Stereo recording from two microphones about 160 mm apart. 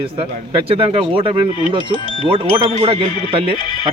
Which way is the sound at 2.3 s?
35° right (ahead or behind).